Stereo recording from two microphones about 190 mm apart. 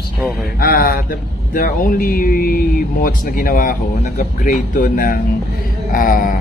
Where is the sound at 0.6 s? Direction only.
50° left (ahead or behind).